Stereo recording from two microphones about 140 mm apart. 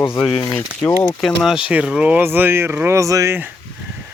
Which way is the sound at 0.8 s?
15° left (ahead or behind).